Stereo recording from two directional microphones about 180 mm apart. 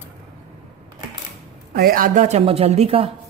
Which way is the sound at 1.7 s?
55° right (ahead or behind).